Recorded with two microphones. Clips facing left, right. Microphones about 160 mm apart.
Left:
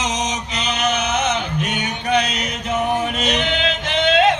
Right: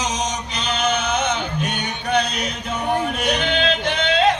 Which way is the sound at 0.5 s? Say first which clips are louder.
Even; 20° left (ahead or behind).